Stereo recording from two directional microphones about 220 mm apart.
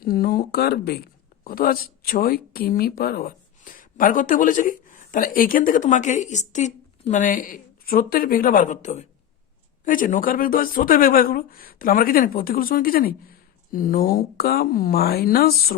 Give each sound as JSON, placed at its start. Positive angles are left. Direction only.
{"t": 0.0, "sound": "speech", "side_deg": 45}